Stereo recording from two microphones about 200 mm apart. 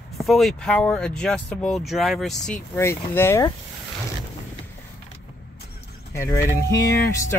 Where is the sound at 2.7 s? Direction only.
10° left (ahead or behind).